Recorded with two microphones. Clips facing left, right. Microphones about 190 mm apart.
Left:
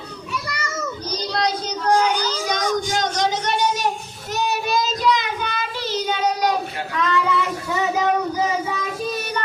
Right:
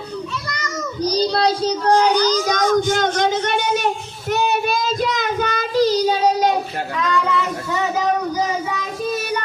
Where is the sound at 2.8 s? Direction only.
55° right (ahead or behind); by 6.6 s 30° right (ahead or behind).